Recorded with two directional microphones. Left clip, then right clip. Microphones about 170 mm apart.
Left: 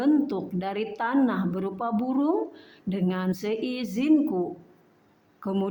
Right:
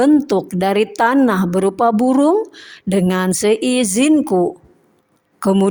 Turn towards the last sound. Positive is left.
turn(degrees=-45)  # may be behind; listen again after turning